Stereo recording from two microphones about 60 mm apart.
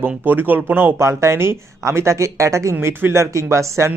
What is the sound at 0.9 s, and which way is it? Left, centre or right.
Speech, right.